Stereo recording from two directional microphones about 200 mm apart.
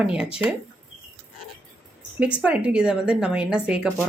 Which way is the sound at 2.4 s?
5° right (ahead or behind).